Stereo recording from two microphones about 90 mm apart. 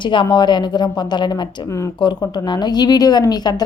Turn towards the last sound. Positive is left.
turn(degrees=50)  # may be behind; listen again after turning